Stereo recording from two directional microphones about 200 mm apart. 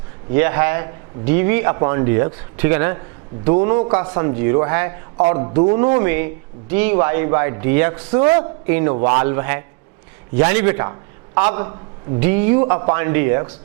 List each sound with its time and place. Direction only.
0.3 s a man's voice: 15° right (ahead or behind)